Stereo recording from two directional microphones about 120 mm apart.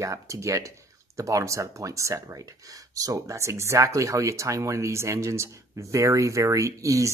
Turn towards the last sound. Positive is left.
turn(degrees=-25)  # may be behind; listen again after turning